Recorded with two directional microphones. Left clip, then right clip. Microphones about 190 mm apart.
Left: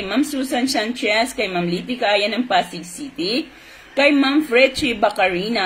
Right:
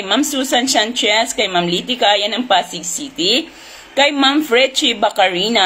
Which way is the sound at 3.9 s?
10° left (ahead or behind).